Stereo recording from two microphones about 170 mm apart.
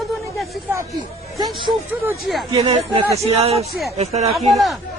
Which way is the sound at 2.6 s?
35° right (ahead or behind).